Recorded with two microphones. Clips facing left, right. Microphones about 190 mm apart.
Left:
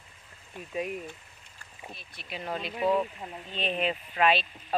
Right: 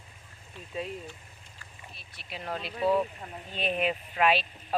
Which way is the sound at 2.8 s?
15° left (ahead or behind).